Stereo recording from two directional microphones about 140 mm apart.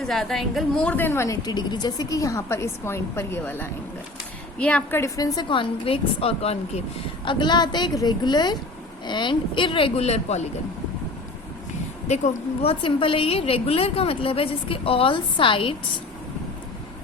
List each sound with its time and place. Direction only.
0.0 s a woman's voice: centre (ahead or behind); by 6.8 s 45° left (ahead or behind)
7.3 s a woman's voice: 30° left (ahead or behind); by 10.4 s 50° left (ahead or behind)
12.0 s speech: 55° left (ahead or behind)
12.8 s a woman's voice: 40° left (ahead or behind)